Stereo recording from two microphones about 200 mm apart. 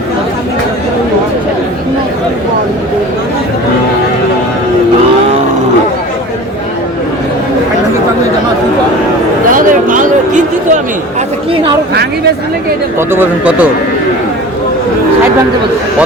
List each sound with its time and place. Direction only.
9.5 s a sound: 45° right (ahead or behind)
11.5 s chatter: 25° right (ahead or behind)
13.0 s speech: 10° right (ahead or behind)